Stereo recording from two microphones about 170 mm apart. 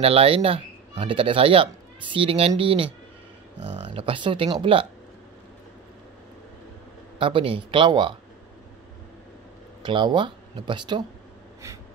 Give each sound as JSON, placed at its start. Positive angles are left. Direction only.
{"t": 0.0, "sound": "speech", "side_deg": -35}
{"t": 7.2, "sound": "speech", "side_deg": -30}
{"t": 9.8, "sound": "speech", "side_deg": -30}